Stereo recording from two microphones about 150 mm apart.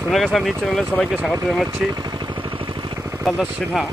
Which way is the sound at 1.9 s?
25° right (ahead or behind).